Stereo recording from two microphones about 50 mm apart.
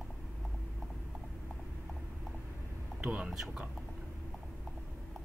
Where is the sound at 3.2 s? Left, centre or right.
Centre.